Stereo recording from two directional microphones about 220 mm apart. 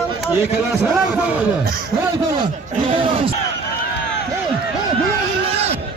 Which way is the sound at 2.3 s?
20° right (ahead or behind).